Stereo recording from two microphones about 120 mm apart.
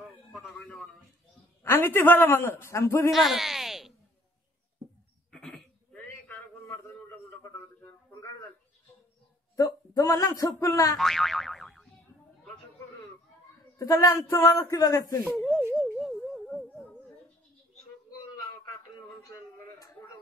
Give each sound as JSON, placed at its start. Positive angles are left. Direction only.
{"t": 0.3, "sound": "a sound", "side_deg": 5}
{"t": 1.6, "sound": "a man's voice", "side_deg": 20}
{"t": 3.1, "sound": "speech", "side_deg": 0}
{"t": 5.3, "sound": "a sound", "side_deg": 5}
{"t": 9.6, "sound": "speech", "side_deg": 30}
{"t": 11.0, "sound": "boing", "side_deg": 0}
{"t": 13.7, "sound": "speech", "side_deg": 25}
{"t": 15.3, "sound": "speech", "side_deg": 0}
{"t": 15.7, "sound": "a sound", "side_deg": -5}